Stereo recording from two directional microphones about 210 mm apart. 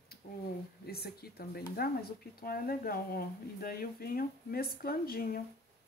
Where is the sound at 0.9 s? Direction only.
50° left (ahead or behind).